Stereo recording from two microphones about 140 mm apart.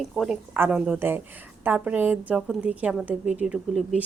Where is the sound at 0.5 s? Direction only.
15° right (ahead or behind).